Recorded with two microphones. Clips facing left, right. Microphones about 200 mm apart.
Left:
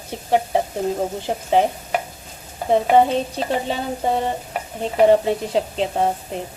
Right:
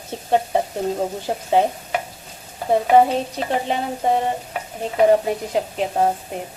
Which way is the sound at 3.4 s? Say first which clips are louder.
Even; 35° left (ahead or behind).